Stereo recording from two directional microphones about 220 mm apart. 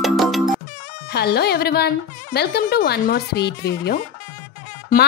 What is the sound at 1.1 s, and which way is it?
Speech, 45° left (ahead or behind).